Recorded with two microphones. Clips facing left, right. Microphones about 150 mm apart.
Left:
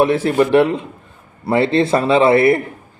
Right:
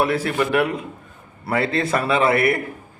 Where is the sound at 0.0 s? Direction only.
25° left (ahead or behind).